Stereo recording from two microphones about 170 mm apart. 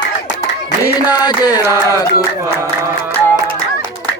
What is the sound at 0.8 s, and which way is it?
Speech, 25° left (ahead or behind).